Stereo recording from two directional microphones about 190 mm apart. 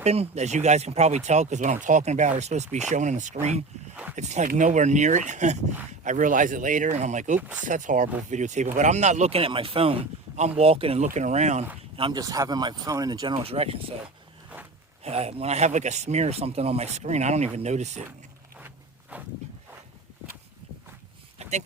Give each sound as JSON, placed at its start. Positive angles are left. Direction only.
{"t": 0.0, "sound": "speech", "side_deg": -35}
{"t": 7.3, "sound": "speech", "side_deg": -10}
{"t": 7.7, "sound": "speech", "side_deg": -45}
{"t": 11.9, "sound": "speech", "side_deg": -25}
{"t": 15.0, "sound": "speech", "side_deg": -35}
{"t": 19.1, "sound": "speech", "side_deg": -10}